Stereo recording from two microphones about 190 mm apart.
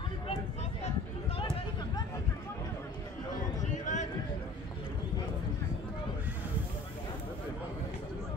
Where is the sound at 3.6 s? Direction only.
40° left (ahead or behind).